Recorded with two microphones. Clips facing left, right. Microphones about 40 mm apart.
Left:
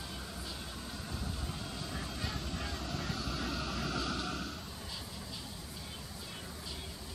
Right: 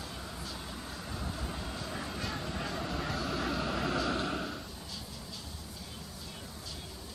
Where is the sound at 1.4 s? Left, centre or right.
Centre.